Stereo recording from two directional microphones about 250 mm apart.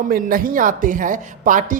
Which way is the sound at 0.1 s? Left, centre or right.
Right.